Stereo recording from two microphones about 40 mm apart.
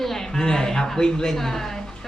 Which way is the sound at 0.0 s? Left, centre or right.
Centre.